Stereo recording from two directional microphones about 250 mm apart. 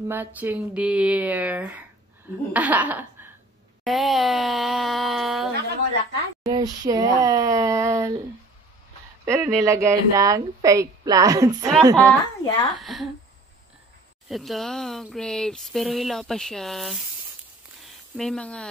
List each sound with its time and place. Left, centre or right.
0.1 s speech: centre
2.5 s laughter: centre
3.8 s speech: centre
6.4 s speech: centre
9.2 s speech: centre
12.1 s speech: centre
14.3 s speech: centre